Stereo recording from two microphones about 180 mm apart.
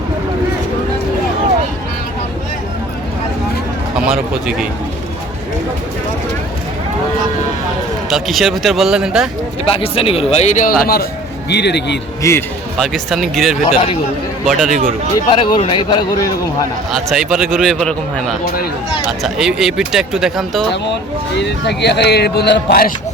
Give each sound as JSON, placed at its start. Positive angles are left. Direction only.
{"t": 3.9, "sound": "speech", "side_deg": -5}
{"t": 8.1, "sound": "speech", "side_deg": 0}
{"t": 9.6, "sound": "speech", "side_deg": 30}
{"t": 11.4, "sound": "speech", "side_deg": 70}
{"t": 12.2, "sound": "speech", "side_deg": 15}
{"t": 12.7, "sound": "speech", "side_deg": 0}
{"t": 13.7, "sound": "speech", "side_deg": 30}
{"t": 14.4, "sound": "speech", "side_deg": 0}
{"t": 15.1, "sound": "speech", "side_deg": 25}
{"t": 16.9, "sound": "speech", "side_deg": 0}
{"t": 19.0, "sound": "speech", "side_deg": 0}
{"t": 21.3, "sound": "speech", "side_deg": 70}